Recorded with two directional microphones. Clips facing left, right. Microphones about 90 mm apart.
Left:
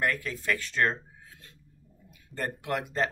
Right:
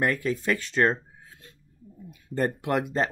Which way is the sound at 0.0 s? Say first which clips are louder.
Right 4 dB; 20° right (ahead or behind).